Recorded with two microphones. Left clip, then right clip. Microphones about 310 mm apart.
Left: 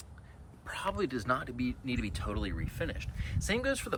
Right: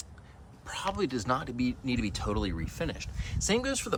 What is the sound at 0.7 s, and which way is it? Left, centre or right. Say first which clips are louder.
Speech: right 2 dB; centre.